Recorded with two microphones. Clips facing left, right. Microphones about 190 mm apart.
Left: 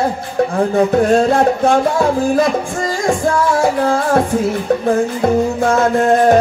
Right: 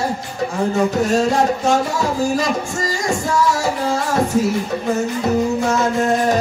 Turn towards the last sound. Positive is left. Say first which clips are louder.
# left 5 dB
turn(degrees=55)  # may be behind; listen again after turning